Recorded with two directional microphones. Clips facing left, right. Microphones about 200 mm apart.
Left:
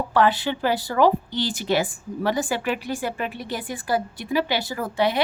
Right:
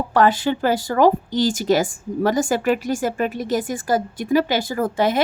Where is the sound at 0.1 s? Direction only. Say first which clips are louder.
Right 4 dB; 45° right (ahead or behind).